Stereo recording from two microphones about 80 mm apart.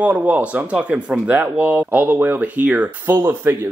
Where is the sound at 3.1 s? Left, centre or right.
Right.